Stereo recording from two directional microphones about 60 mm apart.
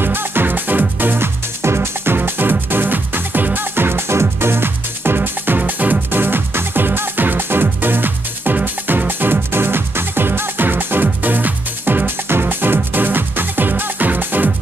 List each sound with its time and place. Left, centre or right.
0.0 s music: right
2.1 s music: right